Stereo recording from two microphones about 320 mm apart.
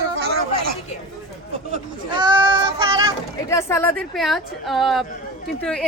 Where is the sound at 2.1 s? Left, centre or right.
Centre.